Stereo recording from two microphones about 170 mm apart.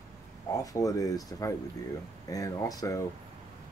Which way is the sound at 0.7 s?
20° left (ahead or behind).